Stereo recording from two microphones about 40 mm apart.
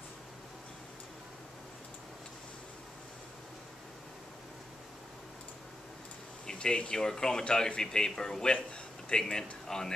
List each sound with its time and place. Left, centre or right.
6.4 s speech: left